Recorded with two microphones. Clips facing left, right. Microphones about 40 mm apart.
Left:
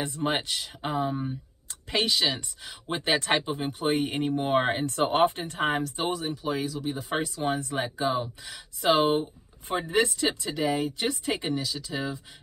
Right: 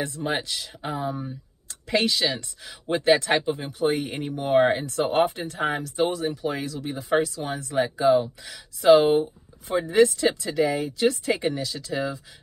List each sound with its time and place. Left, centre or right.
0.0 s speech: left
0.9 s speech: left
1.9 s speech: centre
3.6 s speech: left
5.1 s speech: left
5.9 s speech: centre
7.2 s speech: centre
7.7 s speech: centre